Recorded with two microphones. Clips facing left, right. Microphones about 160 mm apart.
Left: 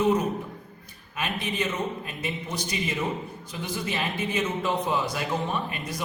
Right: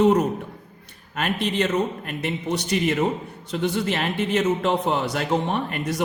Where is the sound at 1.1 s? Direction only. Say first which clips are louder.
Right 6 dB; 75° right (ahead or behind).